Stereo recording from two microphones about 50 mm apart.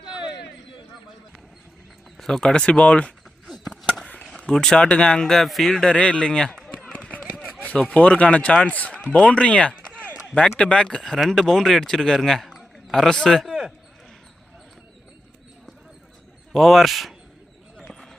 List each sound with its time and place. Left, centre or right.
2.1 s speech: centre
3.5 s a sound: centre
4.2 s speech: centre
5.8 s speech: centre
8.2 s speech: left
8.7 s run: left
9.2 s speech: left
10.0 s run: left
10.4 s speech: left
11.0 s a man's voice: centre
16.5 s speech: centre